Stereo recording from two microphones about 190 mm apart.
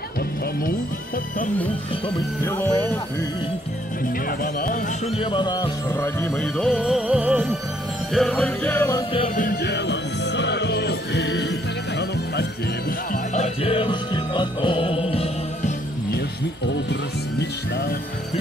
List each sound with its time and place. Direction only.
2.4 s music: 10° left (ahead or behind)
4.4 s speech: 45° left (ahead or behind)
5.1 s music: 25° left (ahead or behind)
9.4 s music: 55° left (ahead or behind)
13.1 s music: 40° left (ahead or behind)
17.4 s speech: 55° left (ahead or behind)